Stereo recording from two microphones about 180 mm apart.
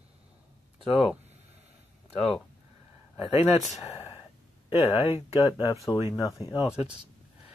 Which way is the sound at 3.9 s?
15° left (ahead or behind).